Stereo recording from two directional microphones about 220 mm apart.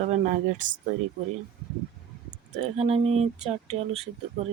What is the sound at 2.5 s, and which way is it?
Speech, 30° right (ahead or behind).